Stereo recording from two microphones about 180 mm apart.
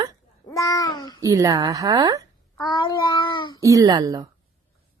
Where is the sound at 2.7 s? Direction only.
25° left (ahead or behind).